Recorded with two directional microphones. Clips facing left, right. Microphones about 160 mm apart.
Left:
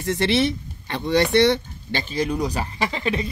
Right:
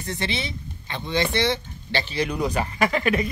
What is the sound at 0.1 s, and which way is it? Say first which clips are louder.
A man's voice: left 9 dB; 80° left.